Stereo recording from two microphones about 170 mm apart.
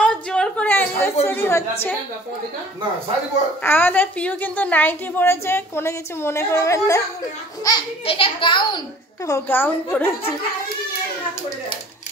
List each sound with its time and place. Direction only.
0.0 s a sound: 5° left (ahead or behind)
1.2 s a woman's voice: 15° left (ahead or behind)
3.6 s a woman's voice: 10° left (ahead or behind)
7.6 s a child's voice: 30° left (ahead or behind)
9.3 s a woman's voice: 10° left (ahead or behind)